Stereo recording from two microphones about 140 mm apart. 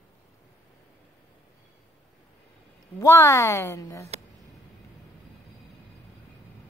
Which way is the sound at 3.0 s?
20° left (ahead or behind).